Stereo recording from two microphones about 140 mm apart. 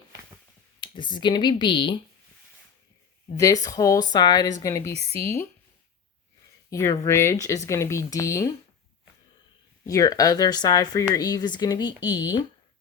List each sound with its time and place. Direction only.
0.8 s speech: 35° left (ahead or behind)
3.3 s speech: 25° left (ahead or behind)
4.9 s speech: 45° right (ahead or behind)
6.7 s speech: 25° left (ahead or behind)
9.8 s speech: 25° left (ahead or behind)